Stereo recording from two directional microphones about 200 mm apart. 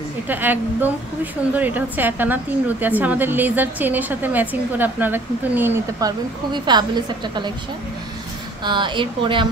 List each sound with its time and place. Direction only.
0.3 s a woman's voice: 10° right (ahead or behind)
8.6 s speech: 25° right (ahead or behind)